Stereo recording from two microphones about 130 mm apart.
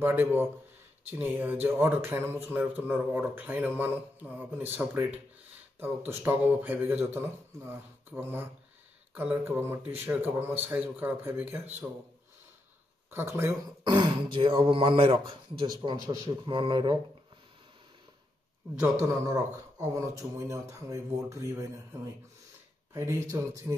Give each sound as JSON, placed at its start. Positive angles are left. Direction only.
{"t": 0.0, "sound": "a man's voice", "side_deg": -15}
{"t": 13.4, "sound": "speech", "side_deg": -20}
{"t": 13.9, "sound": "speech", "side_deg": -35}
{"t": 18.8, "sound": "speech", "side_deg": -20}
{"t": 22.9, "sound": "speech", "side_deg": -20}